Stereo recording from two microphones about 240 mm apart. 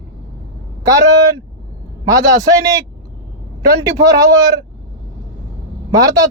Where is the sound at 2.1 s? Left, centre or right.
Centre.